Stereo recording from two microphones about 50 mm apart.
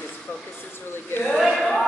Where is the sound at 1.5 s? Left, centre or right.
Centre.